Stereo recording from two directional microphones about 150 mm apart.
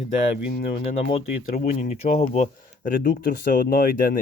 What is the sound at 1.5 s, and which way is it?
Speech, 60° left (ahead or behind).